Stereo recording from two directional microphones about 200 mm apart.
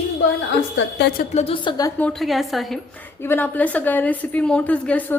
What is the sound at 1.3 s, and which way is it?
Speech, 30° left (ahead or behind).